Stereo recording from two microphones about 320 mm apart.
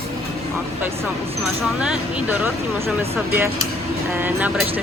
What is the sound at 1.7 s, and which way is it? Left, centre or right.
Speech, centre.